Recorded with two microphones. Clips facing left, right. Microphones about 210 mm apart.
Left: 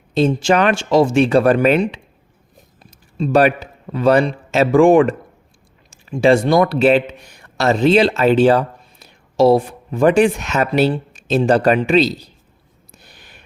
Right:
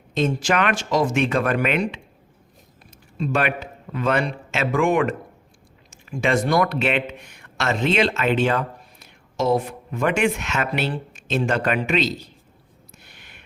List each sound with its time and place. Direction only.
0.1 s a man's voice: 35° left (ahead or behind)
3.2 s a man's voice: 35° left (ahead or behind)
12.9 s a sound: 35° left (ahead or behind)